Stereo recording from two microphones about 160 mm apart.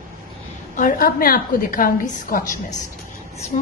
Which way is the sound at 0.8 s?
60° left (ahead or behind).